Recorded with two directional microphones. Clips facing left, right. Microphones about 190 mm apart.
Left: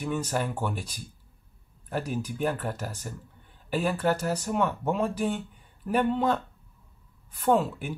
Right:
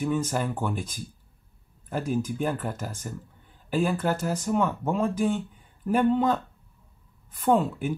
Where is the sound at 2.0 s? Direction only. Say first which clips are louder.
Right 5 dB; 45° right (ahead or behind).